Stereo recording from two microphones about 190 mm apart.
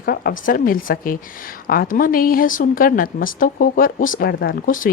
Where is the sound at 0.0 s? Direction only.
50° left (ahead or behind).